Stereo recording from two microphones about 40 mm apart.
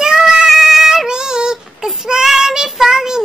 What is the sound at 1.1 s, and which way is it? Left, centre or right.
Child singing, centre.